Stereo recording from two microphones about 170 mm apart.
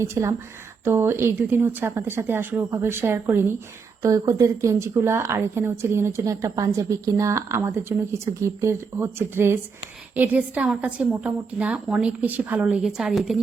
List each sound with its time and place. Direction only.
0.0 s a woman's voice: 15° right (ahead or behind)